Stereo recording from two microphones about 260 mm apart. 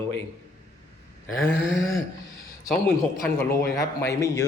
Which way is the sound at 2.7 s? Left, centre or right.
Centre.